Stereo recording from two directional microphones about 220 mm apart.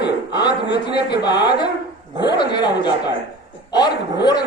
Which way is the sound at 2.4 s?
20° left (ahead or behind).